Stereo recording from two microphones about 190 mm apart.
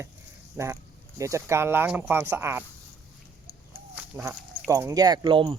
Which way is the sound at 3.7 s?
10° right (ahead or behind).